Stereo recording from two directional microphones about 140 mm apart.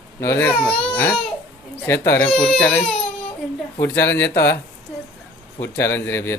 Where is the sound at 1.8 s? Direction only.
15° left (ahead or behind).